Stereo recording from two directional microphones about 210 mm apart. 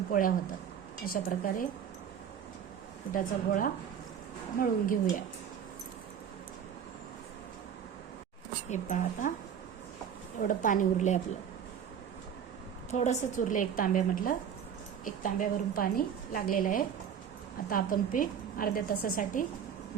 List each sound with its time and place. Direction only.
0.1 s a woman's voice: 40° left (ahead or behind)
3.1 s a woman's voice: 40° left (ahead or behind)
8.7 s a woman's voice: 35° left (ahead or behind)
10.4 s a woman's voice: 40° left (ahead or behind)
12.9 s a woman's voice: 30° left (ahead or behind)